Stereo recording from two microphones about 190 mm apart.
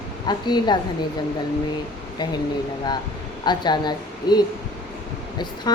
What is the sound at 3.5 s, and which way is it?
A woman's voice, 20° left (ahead or behind).